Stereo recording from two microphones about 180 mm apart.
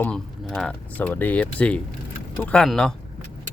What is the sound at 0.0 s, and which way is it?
Speech, 5° left (ahead or behind).